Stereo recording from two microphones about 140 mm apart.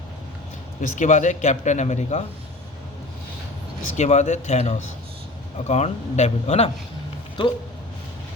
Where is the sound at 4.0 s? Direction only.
55° left (ahead or behind).